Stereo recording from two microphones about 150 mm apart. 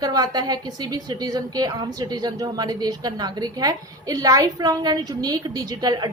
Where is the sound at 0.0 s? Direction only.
25° right (ahead or behind).